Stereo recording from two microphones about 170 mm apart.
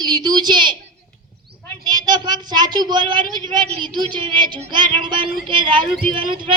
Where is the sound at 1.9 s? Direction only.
25° right (ahead or behind).